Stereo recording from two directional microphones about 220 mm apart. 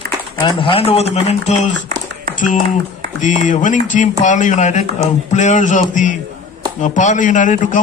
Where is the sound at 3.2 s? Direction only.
35° left (ahead or behind).